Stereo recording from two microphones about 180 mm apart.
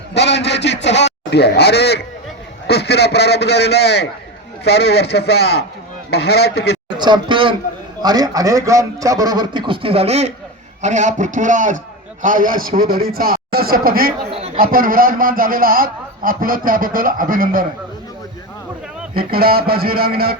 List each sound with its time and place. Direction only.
0.1 s a sound: 75° left (ahead or behind)
2.6 s a man's voice: 65° left (ahead or behind)
6.9 s a man's voice: 25° right (ahead or behind); by 14.1 s 55° right (ahead or behind)
14.3 s speech: 30° right (ahead or behind)
14.6 s a man's voice: 50° right (ahead or behind)
19.1 s speech: 55° right (ahead or behind)